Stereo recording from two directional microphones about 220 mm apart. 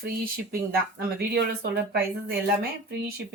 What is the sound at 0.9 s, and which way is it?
Speech, 45° right (ahead or behind).